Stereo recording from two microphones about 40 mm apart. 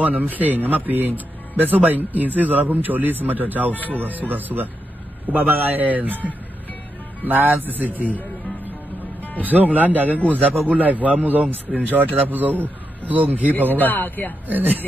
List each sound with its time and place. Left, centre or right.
0.0 s speech: right
9.4 s speech: right
13.7 s speech: left
14.5 s speech: right